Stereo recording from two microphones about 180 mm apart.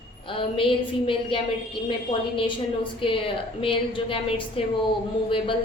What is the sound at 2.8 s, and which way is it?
A woman's voice, 30° left (ahead or behind).